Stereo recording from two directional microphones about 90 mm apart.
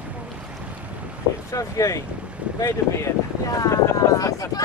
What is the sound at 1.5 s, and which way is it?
A woman's voice, 35° left (ahead or behind).